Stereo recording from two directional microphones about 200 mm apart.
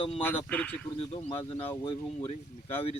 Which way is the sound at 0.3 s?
5° left (ahead or behind).